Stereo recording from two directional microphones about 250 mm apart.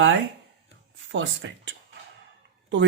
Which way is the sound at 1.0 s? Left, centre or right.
Right.